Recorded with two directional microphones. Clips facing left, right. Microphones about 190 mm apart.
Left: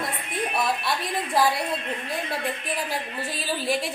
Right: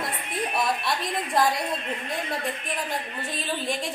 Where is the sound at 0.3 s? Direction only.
Centre (ahead or behind).